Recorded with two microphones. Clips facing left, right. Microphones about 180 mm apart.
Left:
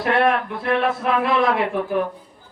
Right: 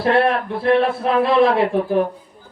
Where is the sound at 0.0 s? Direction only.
30° right (ahead or behind).